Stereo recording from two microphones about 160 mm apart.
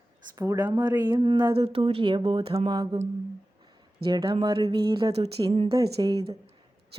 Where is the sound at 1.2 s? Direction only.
30° right (ahead or behind).